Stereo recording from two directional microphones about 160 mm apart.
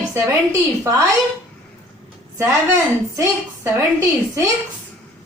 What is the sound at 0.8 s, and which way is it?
Speech, 20° right (ahead or behind).